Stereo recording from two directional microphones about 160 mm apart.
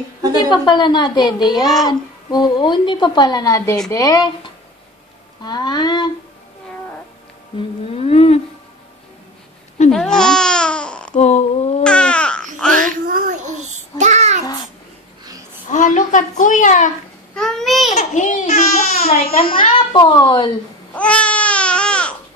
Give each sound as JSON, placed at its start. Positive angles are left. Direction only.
{"t": 0.4, "sound": "a woman's voice", "side_deg": 30}
{"t": 7.5, "sound": "humming", "side_deg": 35}
{"t": 9.8, "sound": "babbling", "side_deg": 5}
{"t": 11.1, "sound": "a sound", "side_deg": 45}
{"t": 11.8, "sound": "baby cry", "side_deg": 5}
{"t": 12.5, "sound": "child singing", "side_deg": 5}
{"t": 13.1, "sound": "child singing", "side_deg": -50}
{"t": 15.7, "sound": "a woman's voice", "side_deg": 50}
{"t": 17.4, "sound": "babbling", "side_deg": 5}
{"t": 17.9, "sound": "speech", "side_deg": 50}
{"t": 20.9, "sound": "baby cry", "side_deg": 10}